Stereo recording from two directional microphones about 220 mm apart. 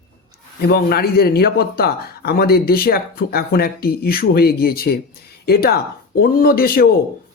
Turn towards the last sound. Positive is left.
turn(degrees=45)  # may be behind; listen again after turning